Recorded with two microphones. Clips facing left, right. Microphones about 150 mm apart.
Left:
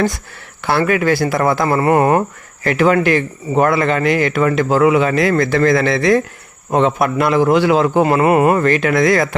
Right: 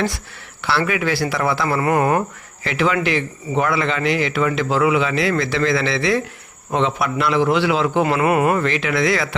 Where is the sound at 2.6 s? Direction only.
45° left (ahead or behind).